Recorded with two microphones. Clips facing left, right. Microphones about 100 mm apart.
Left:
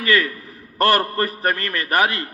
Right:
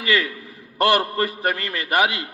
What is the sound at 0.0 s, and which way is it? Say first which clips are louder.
Speech: left 2 dB; 20° right (ahead or behind).